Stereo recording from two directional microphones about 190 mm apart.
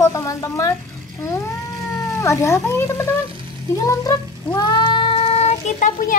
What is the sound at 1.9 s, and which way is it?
Speech, 15° left (ahead or behind).